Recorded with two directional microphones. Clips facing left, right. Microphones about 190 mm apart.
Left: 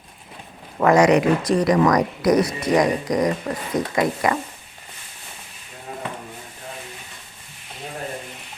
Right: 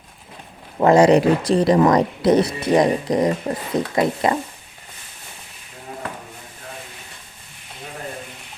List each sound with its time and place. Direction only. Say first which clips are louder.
0.8 s speech: right 2 dB; 30° right (ahead or behind)